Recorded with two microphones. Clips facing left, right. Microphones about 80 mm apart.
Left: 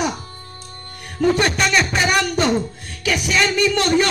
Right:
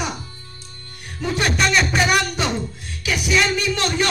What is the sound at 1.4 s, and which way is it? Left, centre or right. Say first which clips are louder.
Speech: left 1 dB; centre.